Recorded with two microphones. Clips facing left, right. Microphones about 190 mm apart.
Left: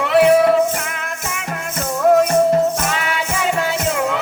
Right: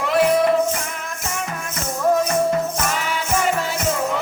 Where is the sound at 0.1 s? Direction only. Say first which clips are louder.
Left 5 dB; 65° left (ahead or behind).